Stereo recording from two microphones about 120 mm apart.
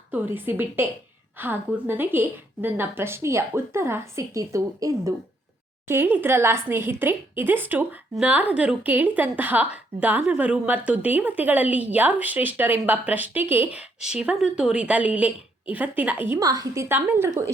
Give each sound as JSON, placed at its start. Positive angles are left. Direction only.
{"t": 0.1, "sound": "a woman's voice", "side_deg": -15}
{"t": 16.4, "sound": "a woman's voice", "side_deg": -30}
{"t": 16.9, "sound": "a woman's voice", "side_deg": -20}